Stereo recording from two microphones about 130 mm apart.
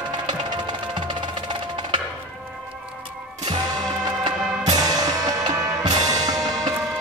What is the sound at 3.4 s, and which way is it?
Music, 30° right (ahead or behind).